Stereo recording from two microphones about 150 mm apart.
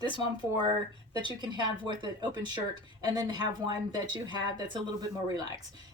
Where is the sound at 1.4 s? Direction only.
30° right (ahead or behind).